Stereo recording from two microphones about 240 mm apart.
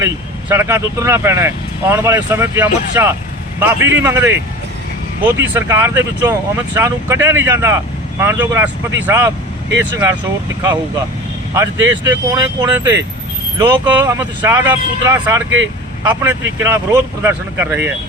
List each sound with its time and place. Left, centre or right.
0.0 s speech: centre
11.5 s speech: centre
15.4 s speech: right
16.0 s speech: centre